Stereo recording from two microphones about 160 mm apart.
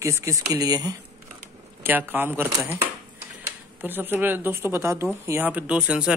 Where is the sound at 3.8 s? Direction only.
10° right (ahead or behind).